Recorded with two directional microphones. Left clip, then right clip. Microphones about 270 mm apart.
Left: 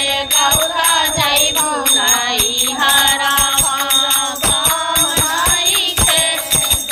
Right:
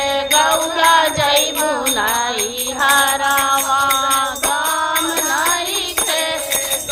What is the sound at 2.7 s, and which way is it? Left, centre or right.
Music, right.